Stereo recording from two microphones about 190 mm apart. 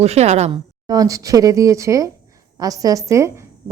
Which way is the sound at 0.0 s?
35° right (ahead or behind).